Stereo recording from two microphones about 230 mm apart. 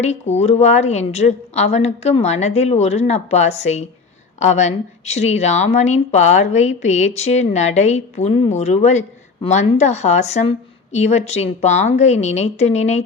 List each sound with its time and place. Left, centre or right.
0.0 s a woman's voice: left